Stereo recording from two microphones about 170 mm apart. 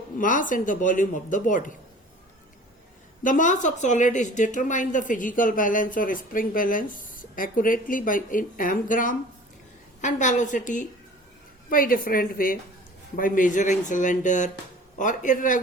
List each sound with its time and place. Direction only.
0.2 s a woman's voice: 50° left (ahead or behind)
3.2 s a woman's voice: 50° left (ahead or behind)